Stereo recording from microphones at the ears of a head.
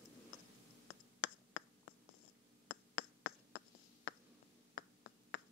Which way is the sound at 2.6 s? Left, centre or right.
Left.